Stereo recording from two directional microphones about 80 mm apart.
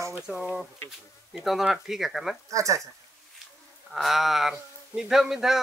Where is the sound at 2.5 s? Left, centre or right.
Right.